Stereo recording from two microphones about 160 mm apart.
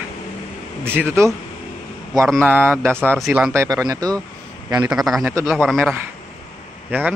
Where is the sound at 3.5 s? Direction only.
20° right (ahead or behind).